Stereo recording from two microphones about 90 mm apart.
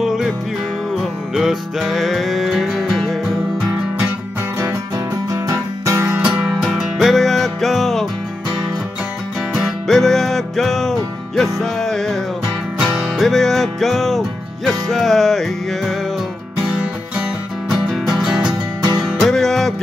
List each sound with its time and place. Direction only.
0.0 s music: centre (ahead or behind)
1.3 s music: 5° right (ahead or behind)
4.6 s music: 40° right (ahead or behind)
6.2 s music: 10° right (ahead or behind)
9.5 s music: centre (ahead or behind)
12.7 s music: 10° right (ahead or behind)
13.0 s music: centre (ahead or behind)
17.6 s music: 5° right (ahead or behind)